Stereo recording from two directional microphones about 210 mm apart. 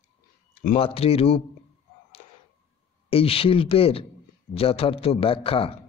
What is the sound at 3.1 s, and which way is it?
A man's voice, 25° left (ahead or behind).